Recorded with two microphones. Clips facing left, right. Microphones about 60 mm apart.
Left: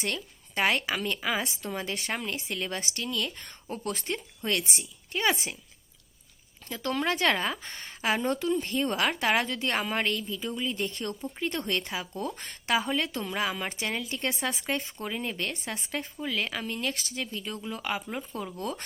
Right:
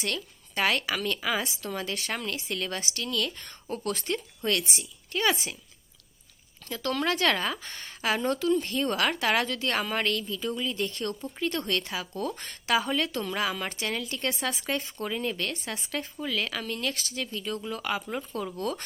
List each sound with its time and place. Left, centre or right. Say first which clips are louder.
0.0 s a woman's voice: even; centre
6.7 s a woman's voice: right 1 dB; centre